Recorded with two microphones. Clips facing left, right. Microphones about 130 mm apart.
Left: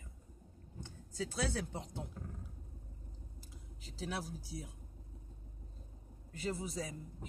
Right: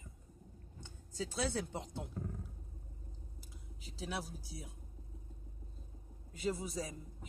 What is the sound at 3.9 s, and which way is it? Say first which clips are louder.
Speech: left 1 dB; 15° right (ahead or behind).